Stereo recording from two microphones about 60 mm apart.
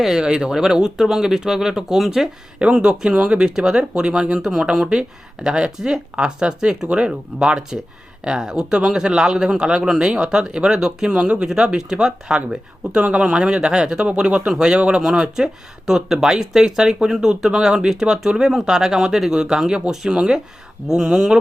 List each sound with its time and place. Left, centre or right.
0.0 s speech: centre